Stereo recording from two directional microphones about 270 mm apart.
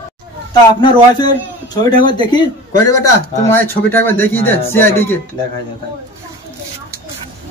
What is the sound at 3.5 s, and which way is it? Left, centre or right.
A man's voice, centre.